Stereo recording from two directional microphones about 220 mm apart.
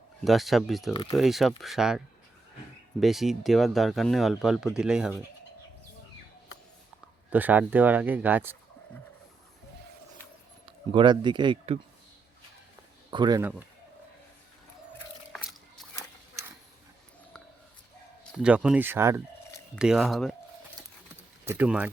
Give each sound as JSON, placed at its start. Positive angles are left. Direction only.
{"t": 0.3, "sound": "speech", "side_deg": 0}
{"t": 3.0, "sound": "speech", "side_deg": 0}
{"t": 7.3, "sound": "speech", "side_deg": -10}
{"t": 10.9, "sound": "speech", "side_deg": -20}
{"t": 13.1, "sound": "speech", "side_deg": -20}
{"t": 18.3, "sound": "speech", "side_deg": -5}
{"t": 21.4, "sound": "speech", "side_deg": -10}